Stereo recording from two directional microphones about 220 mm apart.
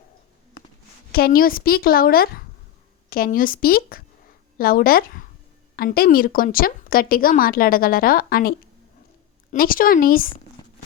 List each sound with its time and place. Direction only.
1.1 s a woman's voice: 45° left (ahead or behind)